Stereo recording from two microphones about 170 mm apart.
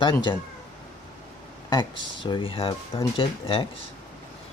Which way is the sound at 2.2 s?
30° left (ahead or behind).